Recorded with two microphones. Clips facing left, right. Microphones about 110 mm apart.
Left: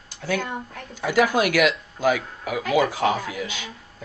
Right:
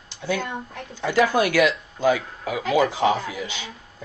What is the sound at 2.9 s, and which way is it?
Speech, 20° right (ahead or behind).